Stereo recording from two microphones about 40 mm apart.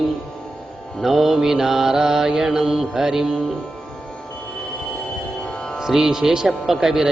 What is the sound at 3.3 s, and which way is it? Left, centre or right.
Mantra, centre.